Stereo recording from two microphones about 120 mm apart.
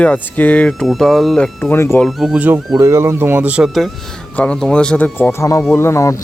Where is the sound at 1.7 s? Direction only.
20° left (ahead or behind).